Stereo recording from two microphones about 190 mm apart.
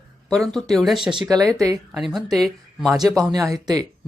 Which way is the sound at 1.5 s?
15° right (ahead or behind).